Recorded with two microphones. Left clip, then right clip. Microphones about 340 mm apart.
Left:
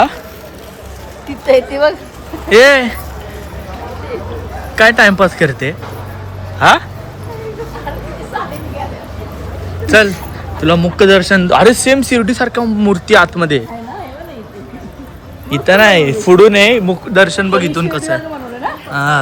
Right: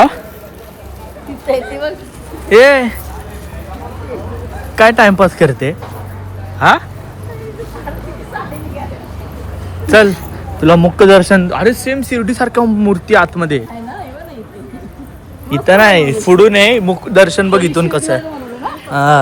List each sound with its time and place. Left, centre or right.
1.5 s a woman's voice: left
2.5 s speech: centre
4.7 s speech: centre
9.8 s speech: centre
11.4 s speech: centre
15.4 s speech: centre
18.6 s a sound: centre